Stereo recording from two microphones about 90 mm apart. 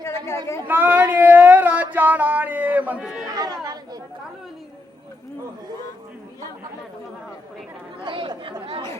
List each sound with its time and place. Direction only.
0.0 s speech: 30° left (ahead or behind)
0.7 s a sound: 20° right (ahead or behind)
3.2 s speech: 45° right (ahead or behind)
8.0 s chatter: 65° right (ahead or behind)